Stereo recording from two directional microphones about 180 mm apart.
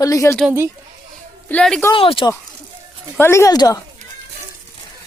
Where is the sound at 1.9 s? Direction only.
30° left (ahead or behind).